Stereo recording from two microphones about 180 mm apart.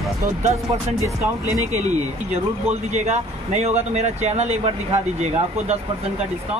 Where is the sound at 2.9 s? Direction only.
40° right (ahead or behind).